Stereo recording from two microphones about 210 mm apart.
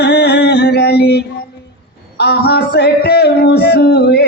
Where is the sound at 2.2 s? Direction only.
50° left (ahead or behind).